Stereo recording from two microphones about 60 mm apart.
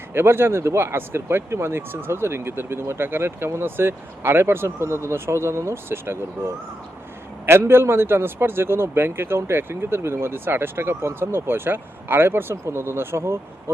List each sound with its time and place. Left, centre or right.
0.1 s a man's voice: right